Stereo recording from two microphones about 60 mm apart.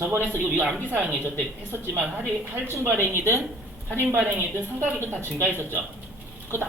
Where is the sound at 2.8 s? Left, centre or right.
Right.